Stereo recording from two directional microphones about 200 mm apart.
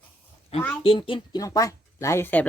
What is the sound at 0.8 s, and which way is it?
Speech, 25° left (ahead or behind).